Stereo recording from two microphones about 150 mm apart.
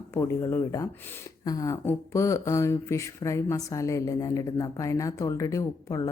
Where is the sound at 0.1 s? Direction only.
20° left (ahead or behind).